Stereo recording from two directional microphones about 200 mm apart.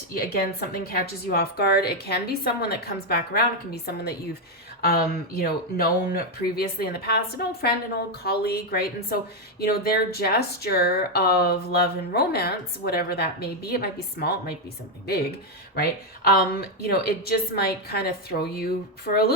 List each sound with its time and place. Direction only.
0.1 s speech: 50° left (ahead or behind)
15.7 s speech: 50° left (ahead or behind)